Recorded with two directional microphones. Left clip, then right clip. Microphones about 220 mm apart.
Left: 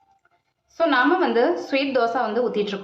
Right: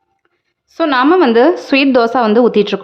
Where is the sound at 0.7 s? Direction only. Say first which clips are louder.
Right 8 dB; 50° right (ahead or behind).